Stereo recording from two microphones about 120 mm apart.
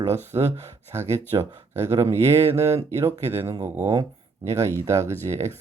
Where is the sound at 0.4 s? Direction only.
25° right (ahead or behind).